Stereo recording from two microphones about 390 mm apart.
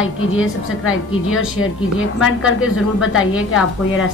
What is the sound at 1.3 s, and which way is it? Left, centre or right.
A woman's voice, left.